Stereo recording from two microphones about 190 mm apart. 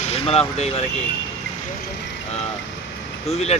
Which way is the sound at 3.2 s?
35° left (ahead or behind).